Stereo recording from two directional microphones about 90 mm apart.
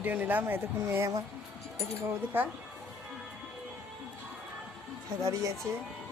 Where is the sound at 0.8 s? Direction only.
35° right (ahead or behind).